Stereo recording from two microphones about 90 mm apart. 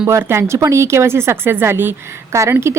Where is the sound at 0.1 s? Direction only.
30° right (ahead or behind).